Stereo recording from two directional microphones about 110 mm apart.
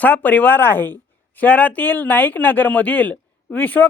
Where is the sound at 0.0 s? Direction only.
15° left (ahead or behind).